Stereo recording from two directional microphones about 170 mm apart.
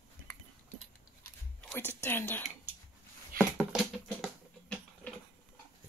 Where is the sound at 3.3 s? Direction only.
60° right (ahead or behind).